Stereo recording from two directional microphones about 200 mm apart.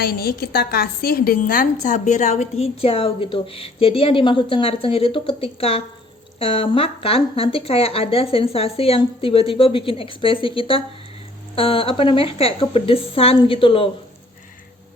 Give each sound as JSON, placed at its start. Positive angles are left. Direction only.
{"t": 0.0, "sound": "a woman's voice", "side_deg": 50}